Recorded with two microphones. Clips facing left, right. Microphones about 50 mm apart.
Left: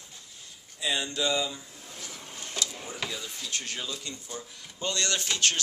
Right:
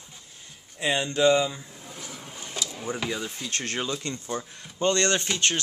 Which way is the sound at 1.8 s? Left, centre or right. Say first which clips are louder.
Right 3 dB; centre.